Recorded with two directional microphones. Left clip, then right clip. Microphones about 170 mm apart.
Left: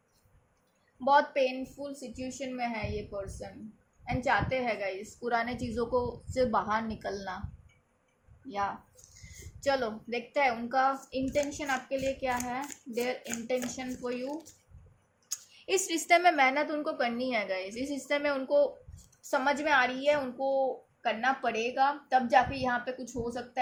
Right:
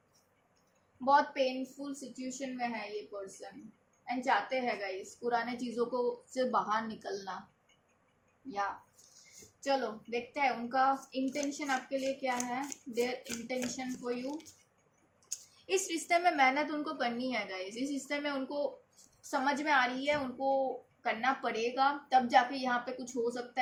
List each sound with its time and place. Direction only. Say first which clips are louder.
1.0 s a woman's voice: left 3 dB; 50° left (ahead or behind)
8.4 s a woman's voice: left 3 dB; 50° left (ahead or behind)
15.3 s a woman's voice: left 3 dB; 60° left (ahead or behind); by 23.5 s 40° left (ahead or behind)